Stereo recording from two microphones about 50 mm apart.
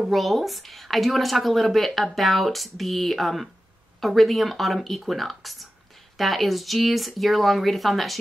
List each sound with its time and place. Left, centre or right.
0.0 s speech: centre